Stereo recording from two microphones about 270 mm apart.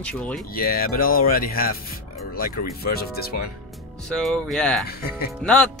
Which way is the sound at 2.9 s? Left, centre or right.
Left.